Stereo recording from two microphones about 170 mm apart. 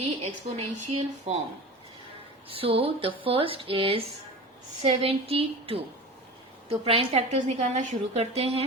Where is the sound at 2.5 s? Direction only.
35° right (ahead or behind).